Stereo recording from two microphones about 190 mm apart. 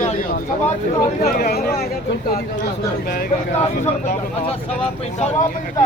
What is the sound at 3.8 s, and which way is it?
Speech, 35° left (ahead or behind).